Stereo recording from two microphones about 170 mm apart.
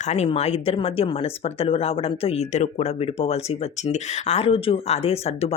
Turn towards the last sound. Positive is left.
turn(degrees=35)  # may be behind; listen again after turning